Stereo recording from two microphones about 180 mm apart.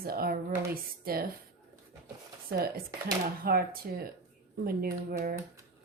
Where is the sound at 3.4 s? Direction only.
55° right (ahead or behind).